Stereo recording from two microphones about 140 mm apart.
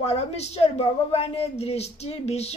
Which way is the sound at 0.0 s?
45° left (ahead or behind).